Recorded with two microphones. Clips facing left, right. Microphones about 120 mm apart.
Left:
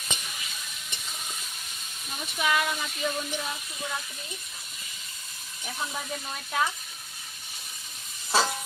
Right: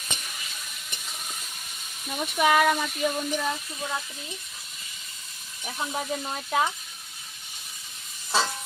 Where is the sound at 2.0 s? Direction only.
60° right (ahead or behind).